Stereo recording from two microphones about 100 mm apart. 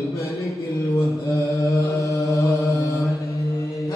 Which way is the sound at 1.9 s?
30° left (ahead or behind).